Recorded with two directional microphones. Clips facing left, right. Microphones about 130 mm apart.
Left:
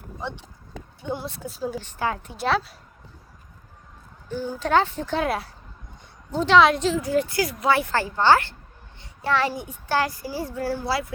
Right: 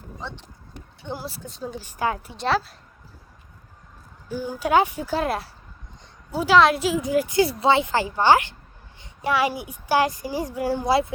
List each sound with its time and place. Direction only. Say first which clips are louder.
0.2 s speech: left 4 dB; 15° left (ahead or behind)
1.1 s speech: left 2 dB; centre (ahead or behind)
1.8 s a woman's voice: right 5 dB; 10° right (ahead or behind)
2.3 s speech: even; centre (ahead or behind)
4.3 s a woman's voice: right 1 dB; 10° right (ahead or behind)
7.3 s a woman's voice: right 3 dB; 25° right (ahead or behind)